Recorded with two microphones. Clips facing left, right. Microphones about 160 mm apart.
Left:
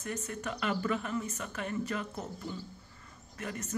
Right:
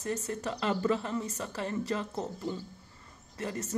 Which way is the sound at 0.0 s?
35° right (ahead or behind).